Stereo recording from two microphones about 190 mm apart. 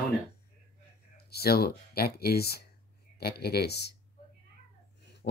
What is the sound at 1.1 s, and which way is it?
Speech, 55° left (ahead or behind).